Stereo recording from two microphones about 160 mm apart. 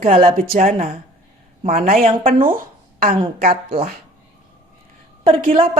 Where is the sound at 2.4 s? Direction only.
60° right (ahead or behind).